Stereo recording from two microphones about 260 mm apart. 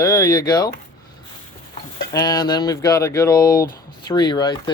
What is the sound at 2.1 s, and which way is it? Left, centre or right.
Speech, centre.